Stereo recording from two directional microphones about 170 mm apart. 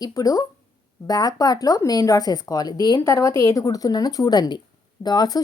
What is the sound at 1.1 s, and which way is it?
Speech, 20° left (ahead or behind).